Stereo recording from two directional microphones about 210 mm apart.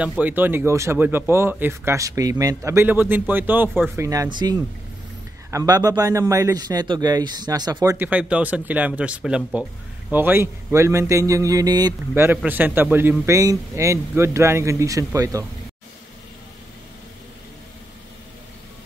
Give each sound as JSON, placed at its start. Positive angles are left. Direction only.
{"t": 0.2, "sound": "a man's voice", "side_deg": -10}